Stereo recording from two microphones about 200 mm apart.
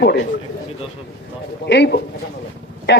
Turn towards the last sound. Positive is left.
turn(degrees=65)  # may be behind; listen again after turning